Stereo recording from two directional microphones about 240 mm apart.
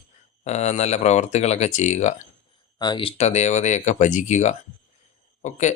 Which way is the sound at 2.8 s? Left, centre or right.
Centre.